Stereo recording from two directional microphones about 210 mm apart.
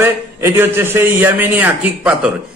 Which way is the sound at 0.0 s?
10° right (ahead or behind).